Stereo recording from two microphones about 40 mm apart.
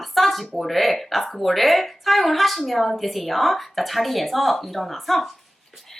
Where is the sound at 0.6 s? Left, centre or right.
Centre.